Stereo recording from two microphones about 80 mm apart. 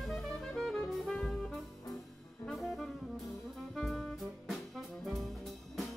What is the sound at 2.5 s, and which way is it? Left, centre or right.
Brass instrument, centre.